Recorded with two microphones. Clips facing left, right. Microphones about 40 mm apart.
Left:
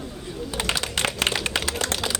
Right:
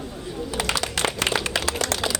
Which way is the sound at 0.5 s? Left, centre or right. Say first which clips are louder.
Right 1 dB; left.